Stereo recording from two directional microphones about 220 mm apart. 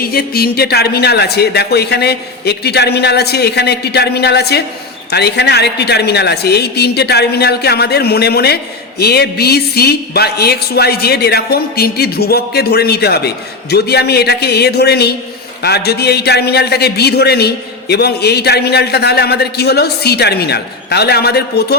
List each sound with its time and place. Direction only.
0.0 s a woman's voice: 45° left (ahead or behind)